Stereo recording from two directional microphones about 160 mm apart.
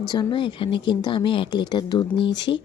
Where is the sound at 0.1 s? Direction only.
30° left (ahead or behind).